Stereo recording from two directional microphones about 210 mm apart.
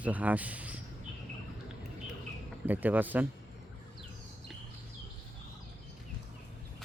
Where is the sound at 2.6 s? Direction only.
10° right (ahead or behind).